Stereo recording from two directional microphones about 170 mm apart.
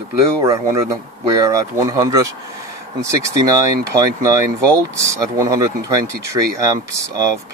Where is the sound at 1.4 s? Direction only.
20° right (ahead or behind).